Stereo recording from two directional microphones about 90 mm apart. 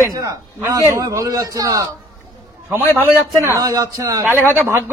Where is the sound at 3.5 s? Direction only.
40° right (ahead or behind).